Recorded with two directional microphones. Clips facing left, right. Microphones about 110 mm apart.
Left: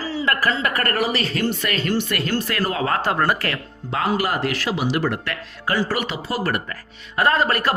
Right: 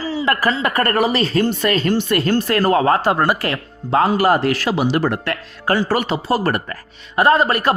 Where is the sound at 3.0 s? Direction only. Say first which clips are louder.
Right 4 dB; 15° right (ahead or behind).